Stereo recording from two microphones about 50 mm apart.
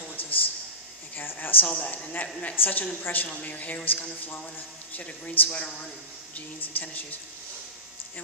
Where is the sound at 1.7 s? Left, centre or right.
Left.